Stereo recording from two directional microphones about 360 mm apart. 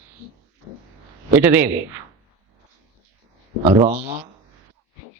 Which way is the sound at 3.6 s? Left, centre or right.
Centre.